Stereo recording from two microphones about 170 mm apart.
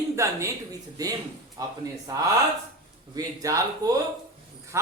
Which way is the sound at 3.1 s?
20° right (ahead or behind).